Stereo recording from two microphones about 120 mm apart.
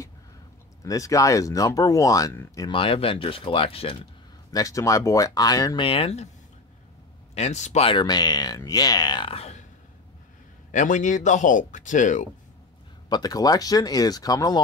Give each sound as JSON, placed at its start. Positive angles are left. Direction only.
{"t": 0.8, "sound": "speech", "side_deg": 30}
{"t": 2.7, "sound": "speech", "side_deg": 50}
{"t": 4.5, "sound": "speech", "side_deg": 30}
{"t": 5.8, "sound": "speech", "side_deg": 50}
{"t": 7.3, "sound": "speech", "side_deg": 70}
{"t": 7.8, "sound": "speech", "side_deg": 40}
{"t": 10.7, "sound": "speech", "side_deg": 90}
{"t": 13.1, "sound": "speech", "side_deg": 35}